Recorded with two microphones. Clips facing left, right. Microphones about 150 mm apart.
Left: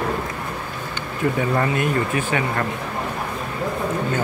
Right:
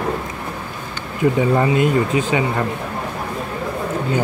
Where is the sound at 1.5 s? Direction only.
20° right (ahead or behind).